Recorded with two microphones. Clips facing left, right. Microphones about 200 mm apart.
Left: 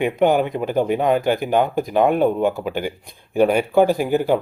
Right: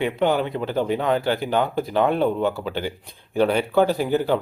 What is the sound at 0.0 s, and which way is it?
Speech, 15° left (ahead or behind).